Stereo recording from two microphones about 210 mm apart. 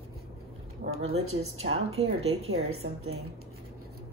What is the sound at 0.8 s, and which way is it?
Speech, 75° right (ahead or behind).